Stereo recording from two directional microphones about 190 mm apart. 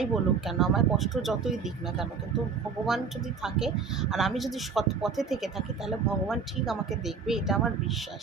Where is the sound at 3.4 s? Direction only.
5° right (ahead or behind).